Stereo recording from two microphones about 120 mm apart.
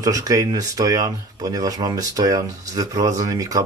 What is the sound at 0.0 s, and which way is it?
Speech, 30° right (ahead or behind).